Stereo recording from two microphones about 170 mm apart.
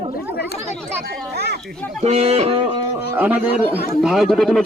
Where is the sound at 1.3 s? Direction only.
70° right (ahead or behind).